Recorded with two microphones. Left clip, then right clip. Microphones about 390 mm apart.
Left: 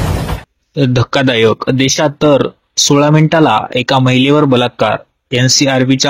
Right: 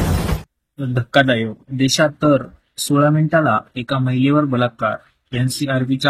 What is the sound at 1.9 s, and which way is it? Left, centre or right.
Speech, centre.